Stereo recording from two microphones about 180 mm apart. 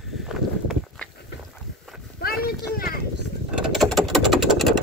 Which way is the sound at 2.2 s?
55° left (ahead or behind).